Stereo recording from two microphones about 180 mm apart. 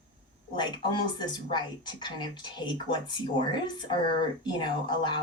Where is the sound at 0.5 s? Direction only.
25° left (ahead or behind).